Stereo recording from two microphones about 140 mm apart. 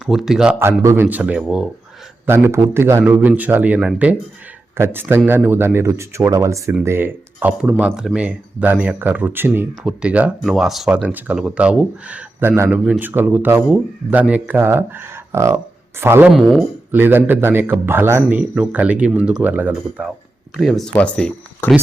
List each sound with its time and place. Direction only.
0.0 s speech: centre (ahead or behind)
0.8 s a man's voice: 20° right (ahead or behind)
1.0 s a man's voice: 10° right (ahead or behind)
2.2 s a man's voice: 15° right (ahead or behind)
20.6 s speech: centre (ahead or behind)